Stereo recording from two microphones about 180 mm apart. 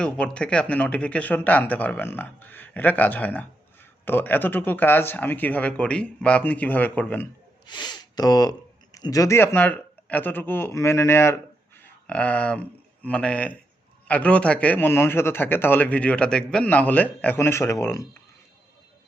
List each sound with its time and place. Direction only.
0.0 s a man's voice: 5° left (ahead or behind)
7.7 s a man's voice: 25° left (ahead or behind)